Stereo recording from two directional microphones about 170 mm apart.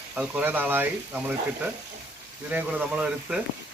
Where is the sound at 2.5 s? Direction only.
10° right (ahead or behind).